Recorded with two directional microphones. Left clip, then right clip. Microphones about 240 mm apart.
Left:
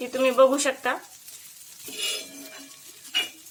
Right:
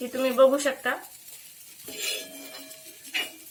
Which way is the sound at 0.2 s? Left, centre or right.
Left.